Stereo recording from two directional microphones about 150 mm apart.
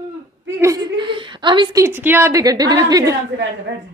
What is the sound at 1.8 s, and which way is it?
A woman's voice, 15° right (ahead or behind).